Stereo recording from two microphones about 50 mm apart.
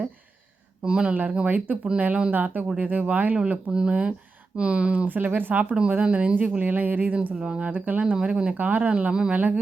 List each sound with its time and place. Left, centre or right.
0.9 s speech: centre
3.3 s speech: right
6.0 s speech: right
7.7 s speech: right
8.1 s speech: centre
8.5 s speech: right